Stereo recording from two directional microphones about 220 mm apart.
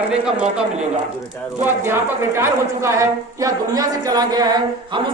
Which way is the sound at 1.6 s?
10° right (ahead or behind).